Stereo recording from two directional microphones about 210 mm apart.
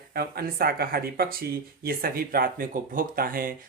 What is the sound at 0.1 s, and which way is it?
Speech, 45° right (ahead or behind).